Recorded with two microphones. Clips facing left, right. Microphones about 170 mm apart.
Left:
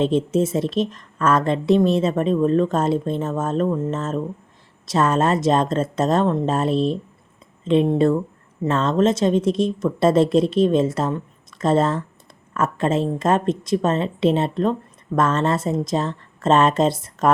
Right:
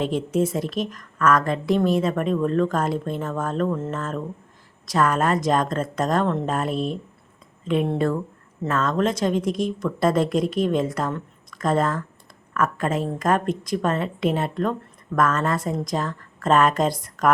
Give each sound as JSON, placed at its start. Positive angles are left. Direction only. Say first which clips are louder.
{"t": 0.0, "sound": "a woman's voice", "louder": "left 4 dB", "side_deg": 25}